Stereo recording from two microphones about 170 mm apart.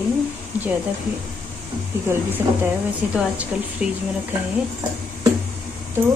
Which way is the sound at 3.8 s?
5° right (ahead or behind).